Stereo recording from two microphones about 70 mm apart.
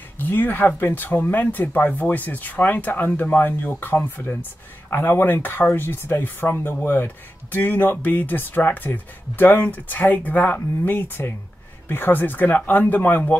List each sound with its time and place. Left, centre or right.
0.2 s speech: left